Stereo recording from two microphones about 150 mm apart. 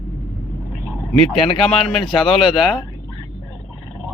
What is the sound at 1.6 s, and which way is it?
Speech, centre (ahead or behind).